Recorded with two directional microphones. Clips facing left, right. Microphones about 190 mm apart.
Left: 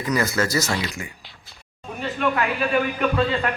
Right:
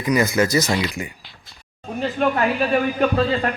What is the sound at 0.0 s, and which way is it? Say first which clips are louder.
Speech: right 4 dB; 15° right (ahead or behind).